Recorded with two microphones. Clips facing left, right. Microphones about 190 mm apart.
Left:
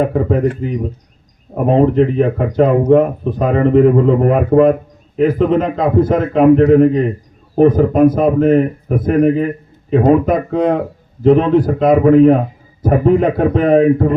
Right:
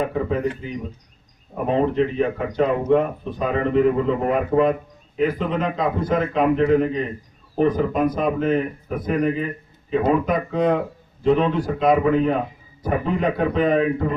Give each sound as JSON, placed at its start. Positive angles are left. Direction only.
{"t": 0.0, "sound": "speech", "side_deg": 45}
{"t": 8.1, "sound": "speech", "side_deg": 50}